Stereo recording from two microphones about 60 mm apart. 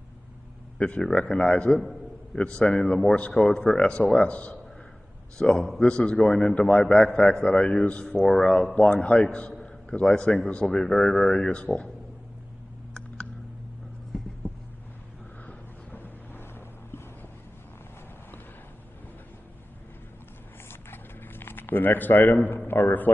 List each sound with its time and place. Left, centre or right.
0.7 s a man's voice: centre
15.4 s vehicle: left
20.9 s a sound: left